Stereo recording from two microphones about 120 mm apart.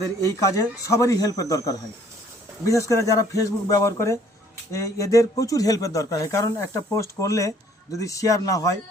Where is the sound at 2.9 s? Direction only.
25° left (ahead or behind).